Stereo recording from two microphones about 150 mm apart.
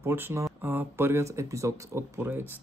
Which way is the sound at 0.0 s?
15° right (ahead or behind).